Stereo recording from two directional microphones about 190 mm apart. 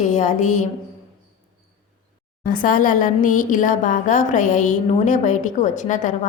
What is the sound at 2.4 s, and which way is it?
A woman's voice, 45° left (ahead or behind).